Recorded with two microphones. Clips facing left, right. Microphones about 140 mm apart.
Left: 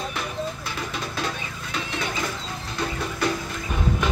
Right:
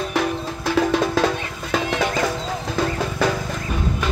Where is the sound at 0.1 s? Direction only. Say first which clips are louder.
Right 7 dB; 85° right.